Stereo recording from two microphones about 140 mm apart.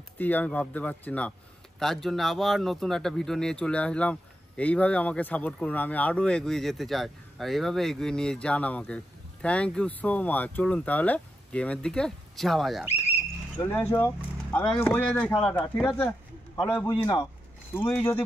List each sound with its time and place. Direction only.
0.2 s a man's voice: 10° left (ahead or behind)
12.8 s speech: 15° right (ahead or behind)
13.1 s a man's voice: 15° left (ahead or behind)
16.6 s a man's voice: 35° left (ahead or behind)
17.8 s a man's voice: 10° left (ahead or behind)